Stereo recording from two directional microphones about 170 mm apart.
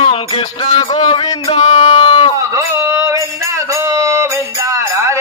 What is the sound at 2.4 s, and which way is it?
Music, 15° right (ahead or behind).